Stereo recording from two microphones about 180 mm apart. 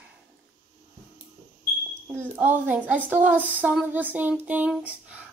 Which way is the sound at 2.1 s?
10° right (ahead or behind).